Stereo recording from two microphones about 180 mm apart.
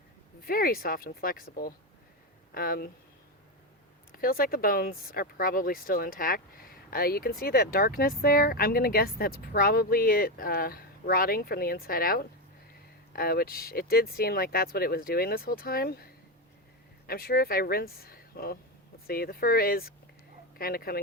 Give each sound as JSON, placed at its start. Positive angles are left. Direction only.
{"t": 0.4, "sound": "speech", "side_deg": 55}
{"t": 4.2, "sound": "speech", "side_deg": 55}
{"t": 17.1, "sound": "speech", "side_deg": 55}